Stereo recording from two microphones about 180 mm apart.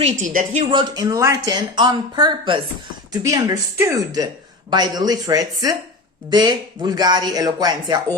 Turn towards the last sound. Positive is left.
turn(degrees=-20)  # may be behind; listen again after turning